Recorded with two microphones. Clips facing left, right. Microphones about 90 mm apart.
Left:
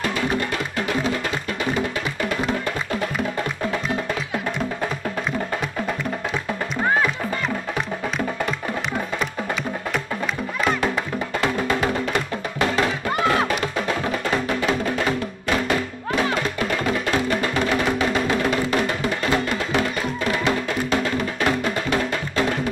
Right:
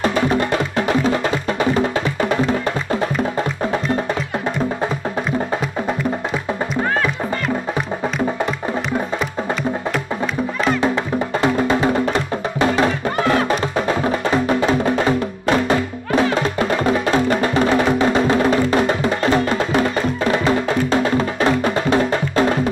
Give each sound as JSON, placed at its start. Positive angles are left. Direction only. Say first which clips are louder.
{"t": 0.0, "sound": "music", "louder": "right 6 dB", "side_deg": -30}
{"t": 11.4, "sound": "music", "louder": "right 5 dB", "side_deg": -25}